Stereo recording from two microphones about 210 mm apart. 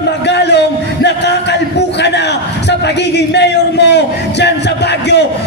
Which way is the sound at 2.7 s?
55° left (ahead or behind).